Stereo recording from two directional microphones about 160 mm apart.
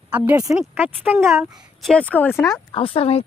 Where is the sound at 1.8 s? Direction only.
5° left (ahead or behind).